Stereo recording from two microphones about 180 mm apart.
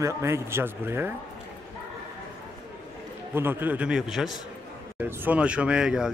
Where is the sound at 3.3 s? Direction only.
10° right (ahead or behind).